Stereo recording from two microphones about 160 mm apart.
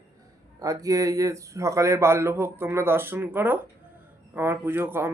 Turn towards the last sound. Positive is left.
turn(degrees=-15)  # may be behind; listen again after turning